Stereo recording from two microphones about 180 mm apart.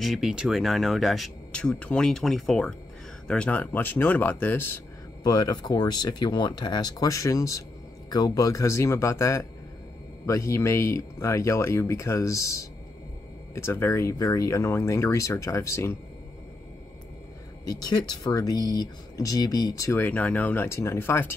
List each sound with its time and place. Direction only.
0.0 s speech: centre (ahead or behind); by 16.0 s 15° left (ahead or behind)
17.6 s speech: 20° left (ahead or behind)